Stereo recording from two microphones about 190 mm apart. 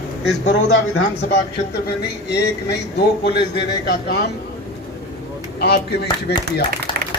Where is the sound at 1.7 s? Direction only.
60° left (ahead or behind).